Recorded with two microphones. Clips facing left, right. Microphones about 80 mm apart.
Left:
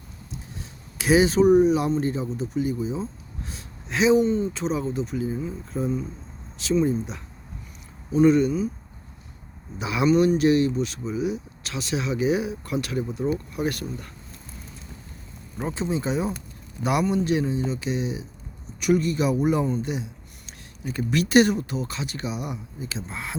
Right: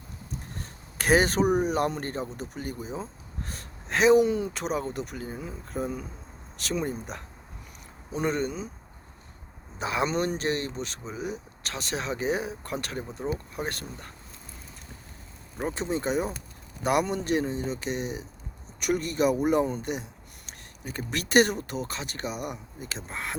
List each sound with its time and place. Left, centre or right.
0.6 s a sound: right
1.5 s speech: right
8.1 s speech: right
9.7 s speech: right
15.5 s speech: right